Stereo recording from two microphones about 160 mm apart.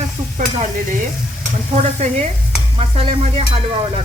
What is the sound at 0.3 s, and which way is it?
Stir, 55° right (ahead or behind).